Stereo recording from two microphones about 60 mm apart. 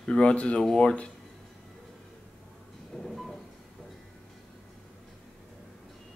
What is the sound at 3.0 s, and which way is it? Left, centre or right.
Train, centre.